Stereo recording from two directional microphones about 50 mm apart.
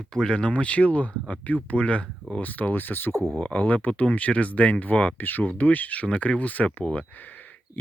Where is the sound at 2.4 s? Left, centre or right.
Left.